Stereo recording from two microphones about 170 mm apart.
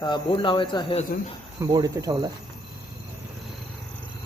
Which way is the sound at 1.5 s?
20° right (ahead or behind).